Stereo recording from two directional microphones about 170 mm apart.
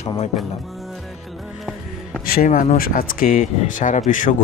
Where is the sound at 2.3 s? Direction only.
55° left (ahead or behind).